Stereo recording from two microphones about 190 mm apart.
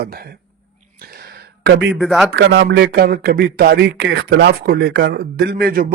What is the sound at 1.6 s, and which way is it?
Speech, 65° right (ahead or behind).